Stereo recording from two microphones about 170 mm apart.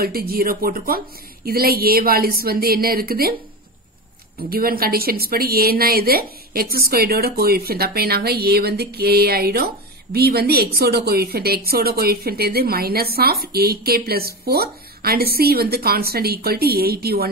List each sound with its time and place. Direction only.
0.0 s a woman's voice: 60° right (ahead or behind)
4.4 s a woman's voice: 60° right (ahead or behind)